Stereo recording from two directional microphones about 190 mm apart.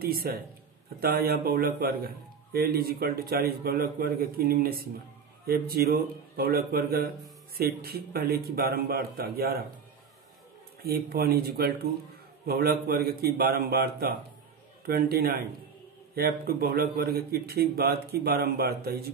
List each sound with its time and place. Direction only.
0.0 s a man's voice: 50° right (ahead or behind)
10.8 s a man's voice: 55° right (ahead or behind)